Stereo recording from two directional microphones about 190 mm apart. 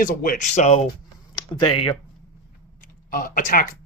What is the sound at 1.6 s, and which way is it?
Speech, 25° left (ahead or behind).